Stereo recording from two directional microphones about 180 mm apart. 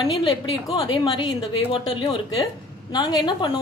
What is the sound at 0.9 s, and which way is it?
A woman's voice, 25° left (ahead or behind).